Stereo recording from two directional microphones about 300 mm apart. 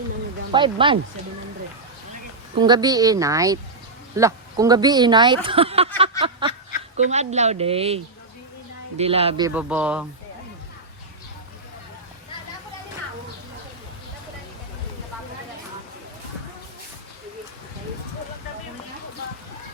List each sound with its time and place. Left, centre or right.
0.5 s speech: centre
2.6 s speech: centre
6.0 s a sound: centre
6.9 s speech: right
9.5 s speech: centre